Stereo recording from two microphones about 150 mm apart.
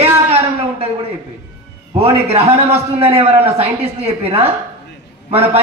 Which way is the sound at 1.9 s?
40° right (ahead or behind).